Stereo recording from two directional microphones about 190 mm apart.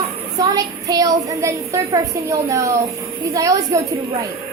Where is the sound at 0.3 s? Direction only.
20° right (ahead or behind).